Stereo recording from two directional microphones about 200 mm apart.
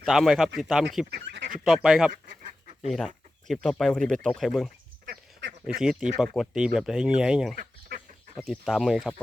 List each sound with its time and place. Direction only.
0.0 s speech: centre (ahead or behind)
1.1 s speech: 65° right (ahead or behind)
1.6 s speech: centre (ahead or behind)
5.0 s duck: 60° right (ahead or behind)
5.8 s speech: 5° right (ahead or behind)
7.5 s duck: 45° right (ahead or behind)
8.4 s speech: centre (ahead or behind)